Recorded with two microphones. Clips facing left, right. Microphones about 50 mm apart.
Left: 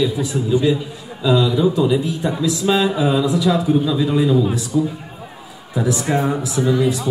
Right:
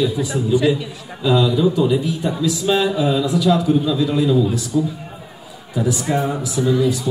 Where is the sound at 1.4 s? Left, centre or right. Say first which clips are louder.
Even; left.